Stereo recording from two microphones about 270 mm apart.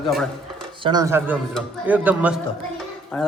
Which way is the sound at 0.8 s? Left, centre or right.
Centre.